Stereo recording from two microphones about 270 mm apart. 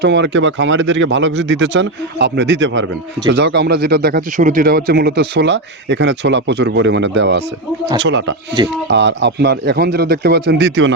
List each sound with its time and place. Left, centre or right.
0.0 s speech: right